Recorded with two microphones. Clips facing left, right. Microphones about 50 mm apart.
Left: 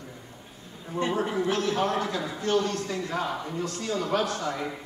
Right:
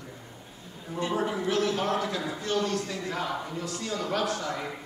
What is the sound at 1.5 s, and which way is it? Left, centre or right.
Speech, left.